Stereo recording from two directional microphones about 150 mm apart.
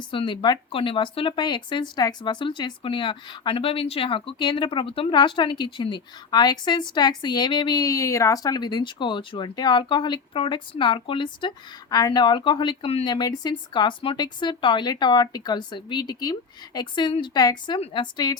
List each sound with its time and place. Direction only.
0.1 s speech: 35° left (ahead or behind)
13.1 s speech: 30° left (ahead or behind)